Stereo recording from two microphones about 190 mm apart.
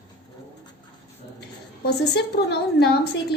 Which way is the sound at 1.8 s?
60° left (ahead or behind).